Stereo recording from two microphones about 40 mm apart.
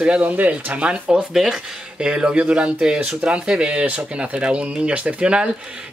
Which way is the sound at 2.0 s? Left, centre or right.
Right.